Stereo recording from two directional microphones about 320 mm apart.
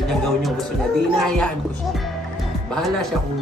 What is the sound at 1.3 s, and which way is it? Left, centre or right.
Speech, centre.